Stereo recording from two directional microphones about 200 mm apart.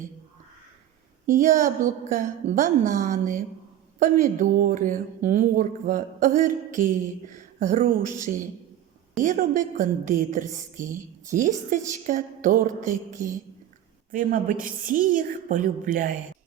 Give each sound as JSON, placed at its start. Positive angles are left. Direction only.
{"t": 1.3, "sound": "a woman's voice", "side_deg": -40}